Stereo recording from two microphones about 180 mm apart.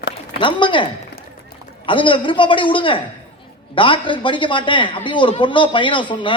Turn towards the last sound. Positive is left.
turn(degrees=25)  # may be behind; listen again after turning